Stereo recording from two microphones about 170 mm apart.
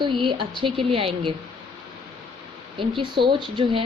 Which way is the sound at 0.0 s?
30° right (ahead or behind).